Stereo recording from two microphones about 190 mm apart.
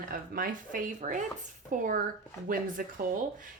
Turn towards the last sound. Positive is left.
turn(degrees=-45)  # may be behind; listen again after turning